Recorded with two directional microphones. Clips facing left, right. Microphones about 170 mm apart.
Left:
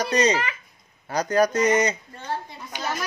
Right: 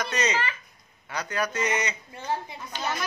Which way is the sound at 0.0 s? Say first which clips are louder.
Left 6 dB; 35° left (ahead or behind).